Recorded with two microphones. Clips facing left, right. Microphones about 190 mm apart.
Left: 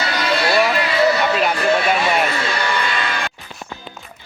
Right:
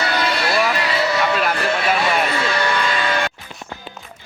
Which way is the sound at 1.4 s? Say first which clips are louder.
Left 3 dB; centre (ahead or behind).